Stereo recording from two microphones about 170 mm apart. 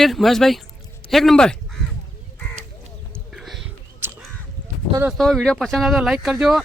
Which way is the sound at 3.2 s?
Centre (ahead or behind).